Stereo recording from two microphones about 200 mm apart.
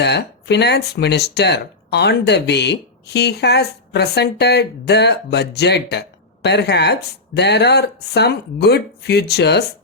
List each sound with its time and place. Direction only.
0.0 s speech: 55° left (ahead or behind)